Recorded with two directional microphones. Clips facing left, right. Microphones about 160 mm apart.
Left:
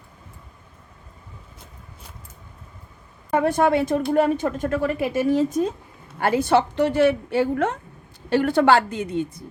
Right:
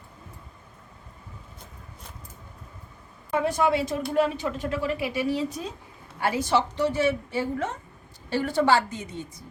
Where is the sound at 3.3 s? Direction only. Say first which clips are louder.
Left 5 dB; 55° left (ahead or behind).